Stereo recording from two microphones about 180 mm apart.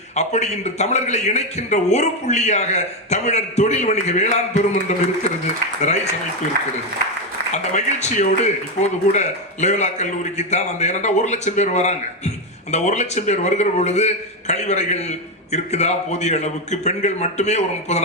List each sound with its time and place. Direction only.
0.2 s a man's voice: 40° left (ahead or behind)
7.5 s a man's voice: 40° left (ahead or behind)